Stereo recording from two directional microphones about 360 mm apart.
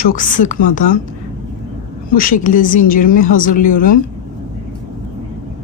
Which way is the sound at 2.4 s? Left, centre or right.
Left.